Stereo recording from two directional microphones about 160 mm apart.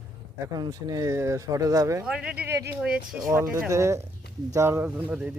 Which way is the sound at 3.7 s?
20° right (ahead or behind).